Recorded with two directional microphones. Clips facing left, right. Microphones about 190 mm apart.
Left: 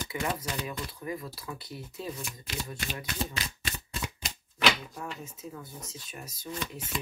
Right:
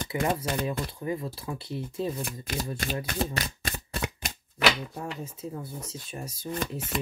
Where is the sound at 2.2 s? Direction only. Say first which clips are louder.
Right 6 dB; 45° right (ahead or behind).